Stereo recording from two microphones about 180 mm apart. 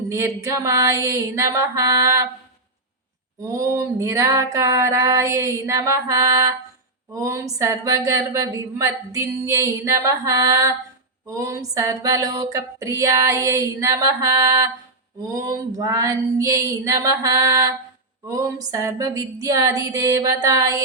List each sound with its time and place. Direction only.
0.1 s a woman's voice: 15° right (ahead or behind)
3.5 s a woman's voice: 15° right (ahead or behind)
11.3 s a sound: 20° right (ahead or behind)